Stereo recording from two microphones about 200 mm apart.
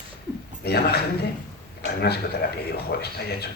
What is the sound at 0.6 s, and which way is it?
Speech, 55° left (ahead or behind).